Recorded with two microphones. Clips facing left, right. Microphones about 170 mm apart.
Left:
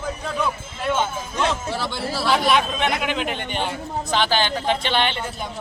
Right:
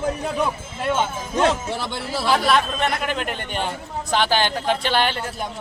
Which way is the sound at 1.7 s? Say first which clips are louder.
Even; 20° right (ahead or behind).